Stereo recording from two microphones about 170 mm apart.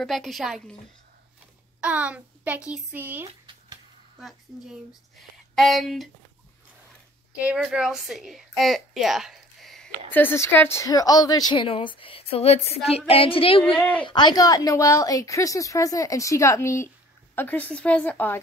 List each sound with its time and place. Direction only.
0.0 s speech: centre (ahead or behind)
1.8 s speech: 10° right (ahead or behind)
4.2 s speech: centre (ahead or behind)
7.3 s a woman's voice: 5° right (ahead or behind)
10.1 s a woman's voice: 15° left (ahead or behind); by 13.6 s 30° left (ahead or behind)
13.7 s a woman's voice: 10° left (ahead or behind)
14.0 s a woman's voice: 25° left (ahead or behind)